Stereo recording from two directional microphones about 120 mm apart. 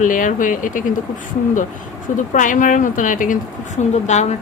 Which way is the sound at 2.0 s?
90° left.